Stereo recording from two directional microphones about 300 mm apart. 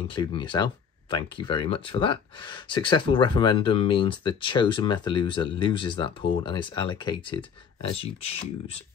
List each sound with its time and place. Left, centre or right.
0.1 s speech: centre